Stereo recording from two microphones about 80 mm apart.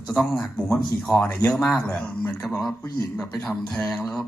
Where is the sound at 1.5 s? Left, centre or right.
Centre.